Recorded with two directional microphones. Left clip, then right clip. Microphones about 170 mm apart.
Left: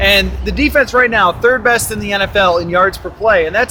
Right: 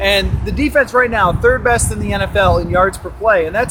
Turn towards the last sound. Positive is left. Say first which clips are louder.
# left 2 dB
turn(degrees=15)  # may be behind; listen again after turning